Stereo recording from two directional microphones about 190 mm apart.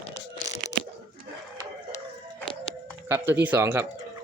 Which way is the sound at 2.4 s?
25° left (ahead or behind).